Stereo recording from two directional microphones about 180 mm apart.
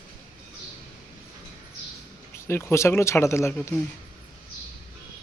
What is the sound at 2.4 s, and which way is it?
Speech, 15° left (ahead or behind).